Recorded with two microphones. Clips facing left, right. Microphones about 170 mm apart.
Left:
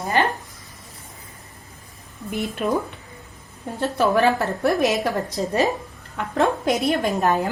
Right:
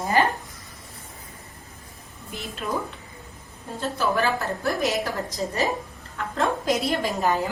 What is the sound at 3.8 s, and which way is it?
A woman's voice, 65° left (ahead or behind).